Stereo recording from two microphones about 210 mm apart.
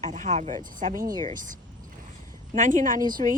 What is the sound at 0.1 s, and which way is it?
Speech, 35° right (ahead or behind).